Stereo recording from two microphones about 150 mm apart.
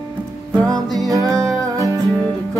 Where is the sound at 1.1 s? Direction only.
20° right (ahead or behind).